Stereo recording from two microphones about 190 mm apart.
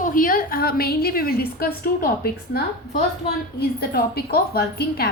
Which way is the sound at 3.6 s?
55° left (ahead or behind).